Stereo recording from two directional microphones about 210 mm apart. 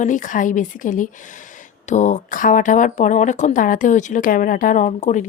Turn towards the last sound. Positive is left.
turn(degrees=35)  # may be behind; listen again after turning